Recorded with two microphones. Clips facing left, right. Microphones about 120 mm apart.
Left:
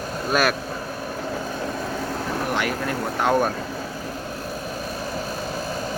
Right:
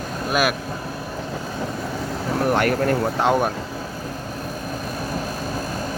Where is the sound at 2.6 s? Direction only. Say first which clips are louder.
Right 6 dB; 50° right (ahead or behind).